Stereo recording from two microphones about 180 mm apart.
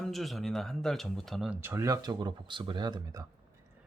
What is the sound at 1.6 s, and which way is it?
Speech, 15° right (ahead or behind).